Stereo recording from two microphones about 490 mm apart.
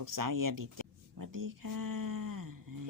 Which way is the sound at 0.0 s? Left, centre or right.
Right.